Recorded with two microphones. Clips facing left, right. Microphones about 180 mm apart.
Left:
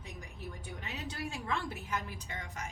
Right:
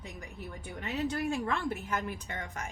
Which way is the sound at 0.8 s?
50° right (ahead or behind).